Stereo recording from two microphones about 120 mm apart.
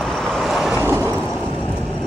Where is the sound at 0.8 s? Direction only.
20° right (ahead or behind).